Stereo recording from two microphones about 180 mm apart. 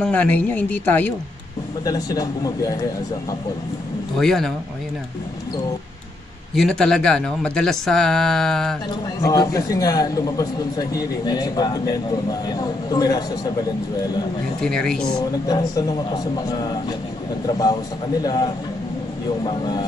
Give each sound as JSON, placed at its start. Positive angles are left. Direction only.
{"t": 0.0, "sound": "speech", "side_deg": 10}
{"t": 1.9, "sound": "a man's voice", "side_deg": 20}
{"t": 4.2, "sound": "speech", "side_deg": 0}
{"t": 6.5, "sound": "speech", "side_deg": 0}
{"t": 9.2, "sound": "a man's voice", "side_deg": 20}
{"t": 14.6, "sound": "speech", "side_deg": 5}
{"t": 15.1, "sound": "a man's voice", "side_deg": 20}